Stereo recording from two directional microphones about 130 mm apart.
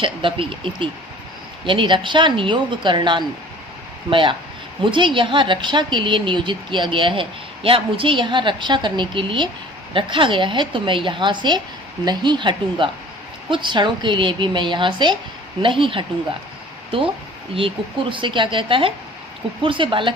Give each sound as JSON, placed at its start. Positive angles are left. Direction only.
{"t": 0.0, "sound": "a woman's voice", "side_deg": -40}
{"t": 17.5, "sound": "a woman's voice", "side_deg": -40}